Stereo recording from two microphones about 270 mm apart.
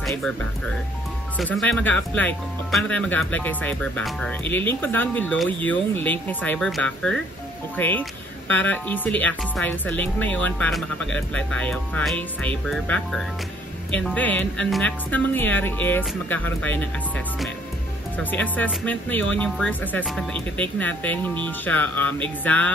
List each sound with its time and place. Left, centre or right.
0.0 s speech: centre
1.4 s speech: centre
18.1 s speech: centre